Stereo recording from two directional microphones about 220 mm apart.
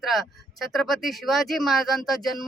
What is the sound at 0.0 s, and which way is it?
Speech, centre (ahead or behind).